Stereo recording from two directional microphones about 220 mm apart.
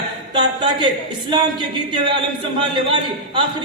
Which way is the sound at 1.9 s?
20° right (ahead or behind).